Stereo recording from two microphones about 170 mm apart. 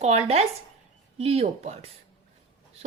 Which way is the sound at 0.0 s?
40° right (ahead or behind).